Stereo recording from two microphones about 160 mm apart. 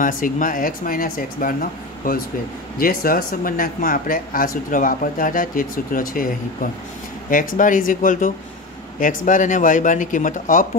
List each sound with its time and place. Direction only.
0.0 s speech: 55° left (ahead or behind)